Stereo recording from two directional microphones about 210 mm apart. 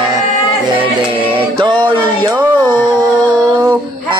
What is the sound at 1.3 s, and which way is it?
Music, 25° right (ahead or behind).